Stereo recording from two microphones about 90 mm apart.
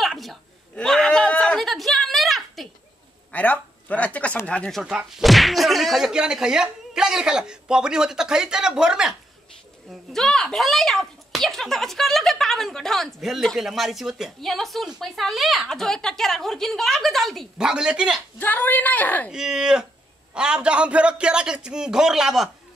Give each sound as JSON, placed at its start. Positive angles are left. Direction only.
{"t": 0.0, "sound": "a sound", "side_deg": 0}
{"t": 3.3, "sound": "speech", "side_deg": 15}
{"t": 4.8, "sound": "speech", "side_deg": -5}
{"t": 9.8, "sound": "a child's voice", "side_deg": 5}
{"t": 17.6, "sound": "speech", "side_deg": -10}
{"t": 18.4, "sound": "a woman's voice", "side_deg": 20}
{"t": 19.3, "sound": "speech", "side_deg": -5}